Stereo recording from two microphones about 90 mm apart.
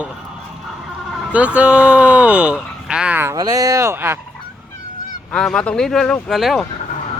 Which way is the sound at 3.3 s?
40° right (ahead or behind).